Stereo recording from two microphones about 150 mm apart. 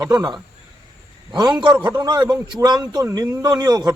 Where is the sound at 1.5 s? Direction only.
25° right (ahead or behind).